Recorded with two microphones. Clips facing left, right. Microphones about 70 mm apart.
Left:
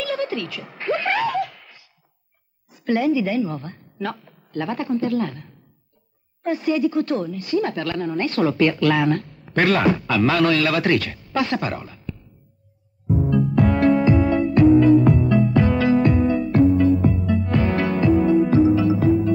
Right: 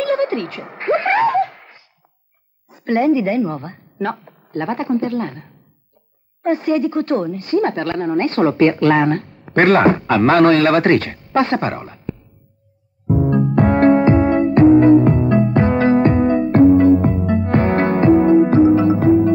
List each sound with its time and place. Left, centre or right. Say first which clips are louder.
0.0 s a sound: right 7 dB; right
2.7 s speech: right 4 dB; right
13.3 s music: right 3 dB; right